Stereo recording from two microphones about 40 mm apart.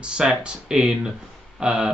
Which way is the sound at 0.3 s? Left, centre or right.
Right.